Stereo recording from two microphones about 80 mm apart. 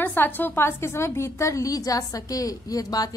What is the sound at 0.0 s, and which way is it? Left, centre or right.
A woman's voice, left.